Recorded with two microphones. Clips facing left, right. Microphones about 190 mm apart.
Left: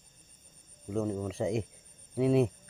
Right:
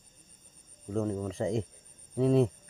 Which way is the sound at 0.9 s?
5° left (ahead or behind).